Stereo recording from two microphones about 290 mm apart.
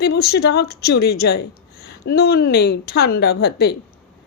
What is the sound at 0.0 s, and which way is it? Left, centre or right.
A woman's voice, left.